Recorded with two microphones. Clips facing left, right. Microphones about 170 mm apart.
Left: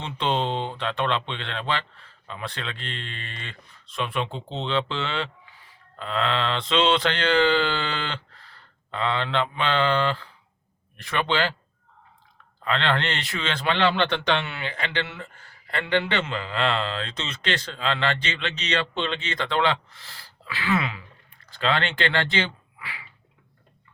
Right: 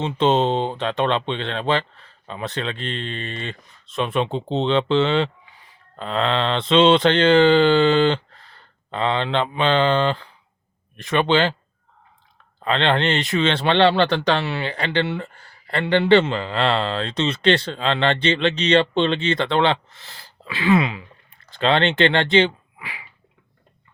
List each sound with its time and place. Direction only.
0.3 s a man's voice: 40° right (ahead or behind)
2.2 s speech: 25° right (ahead or behind)
12.6 s a man's voice: 25° right (ahead or behind)